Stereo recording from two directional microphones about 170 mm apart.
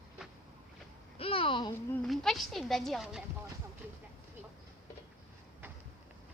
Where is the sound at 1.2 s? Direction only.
35° left (ahead or behind).